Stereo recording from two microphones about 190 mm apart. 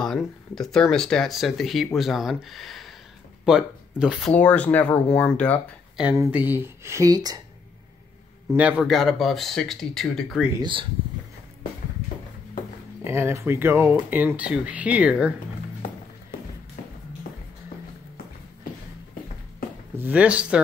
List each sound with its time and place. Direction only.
0.0 s speech: centre (ahead or behind)
4.3 s speech: 10° left (ahead or behind)
6.1 s speech: 10° right (ahead or behind)
8.5 s speech: 5° right (ahead or behind)
10.5 s speech: 25° right (ahead or behind)
13.0 s speech: 15° right (ahead or behind)
16.8 s tap: 45° left (ahead or behind)
20.0 s speech: 10° right (ahead or behind)